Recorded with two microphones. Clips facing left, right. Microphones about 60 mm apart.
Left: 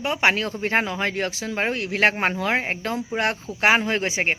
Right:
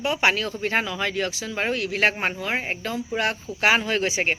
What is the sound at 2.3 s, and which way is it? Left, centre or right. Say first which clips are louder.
Speech: left 4 dB; left.